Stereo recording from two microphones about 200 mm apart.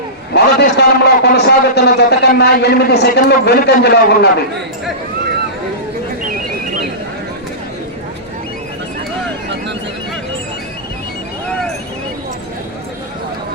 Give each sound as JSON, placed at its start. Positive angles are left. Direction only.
{"t": 0.3, "sound": "a man's voice", "side_deg": 55}